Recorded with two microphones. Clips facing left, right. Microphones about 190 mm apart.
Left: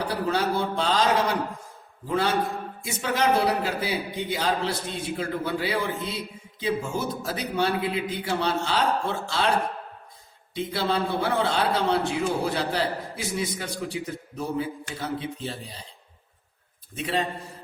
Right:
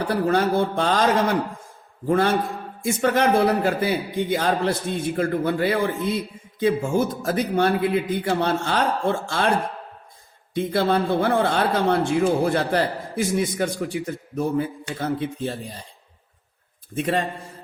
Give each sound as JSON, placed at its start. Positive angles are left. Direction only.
{"t": 0.1, "sound": "a man's voice", "side_deg": -55}
{"t": 2.0, "sound": "a man's voice", "side_deg": -55}
{"t": 10.5, "sound": "a man's voice", "side_deg": -55}
{"t": 16.9, "sound": "a man's voice", "side_deg": -55}